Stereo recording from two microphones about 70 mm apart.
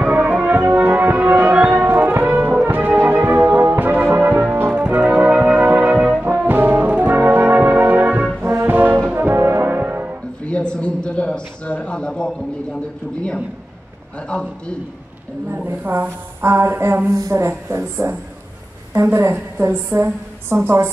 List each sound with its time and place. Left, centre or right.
0.0 s music: right
6.2 s brass instrument: right
10.4 s a sound: centre
14.2 s a man's voice: centre
15.5 s a woman's voice: right
19.6 s a woman's voice: right